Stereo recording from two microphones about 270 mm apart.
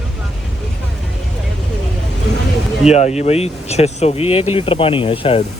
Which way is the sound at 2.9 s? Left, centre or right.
Left.